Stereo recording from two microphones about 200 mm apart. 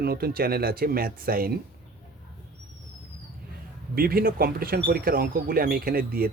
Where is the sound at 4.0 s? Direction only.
50° right (ahead or behind).